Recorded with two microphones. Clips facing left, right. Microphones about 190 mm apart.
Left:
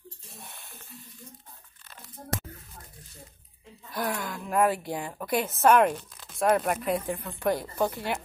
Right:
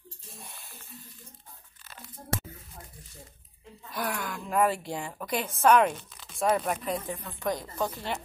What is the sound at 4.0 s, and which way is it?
Speech, 15° left (ahead or behind).